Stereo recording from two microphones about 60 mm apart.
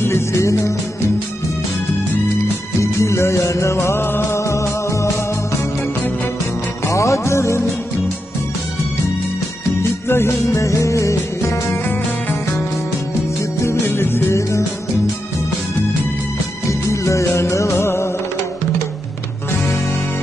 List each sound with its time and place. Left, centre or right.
0.0 s music: left
2.8 s music: left
4.4 s music: left
6.9 s music: left
10.0 s music: left
11.8 s music: left
13.6 s music: left
16.6 s music: left